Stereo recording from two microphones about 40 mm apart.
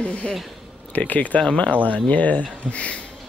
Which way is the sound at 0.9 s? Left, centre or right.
Left.